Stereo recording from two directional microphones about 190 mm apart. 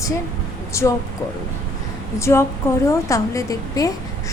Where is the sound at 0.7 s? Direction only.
15° left (ahead or behind).